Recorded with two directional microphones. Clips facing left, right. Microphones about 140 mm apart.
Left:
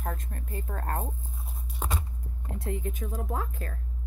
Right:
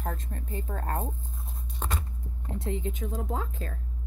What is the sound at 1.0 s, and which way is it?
Speech, 10° left (ahead or behind).